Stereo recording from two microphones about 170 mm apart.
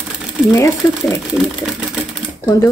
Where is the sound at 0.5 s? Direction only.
15° left (ahead or behind).